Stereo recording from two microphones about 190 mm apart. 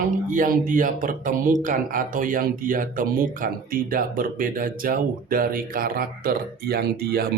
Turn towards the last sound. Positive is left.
turn(degrees=-55)  # may be behind; listen again after turning